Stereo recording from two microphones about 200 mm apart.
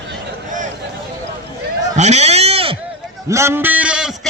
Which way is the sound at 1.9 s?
35° right (ahead or behind).